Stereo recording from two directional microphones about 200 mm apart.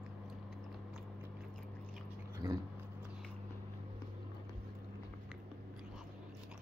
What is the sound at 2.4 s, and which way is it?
Speech, 15° right (ahead or behind).